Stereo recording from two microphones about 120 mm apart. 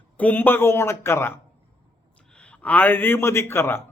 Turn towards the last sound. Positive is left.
turn(degrees=20)  # may be behind; listen again after turning